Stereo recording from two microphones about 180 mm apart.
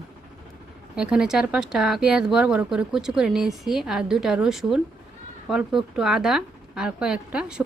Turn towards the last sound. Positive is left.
turn(degrees=-5)  # may be behind; listen again after turning